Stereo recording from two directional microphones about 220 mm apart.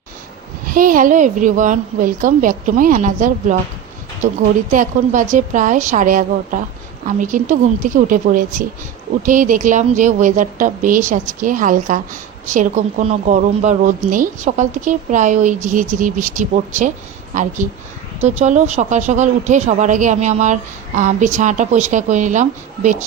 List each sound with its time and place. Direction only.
0.7 s speech: 40° right (ahead or behind)
4.7 s speech: 35° right (ahead or behind)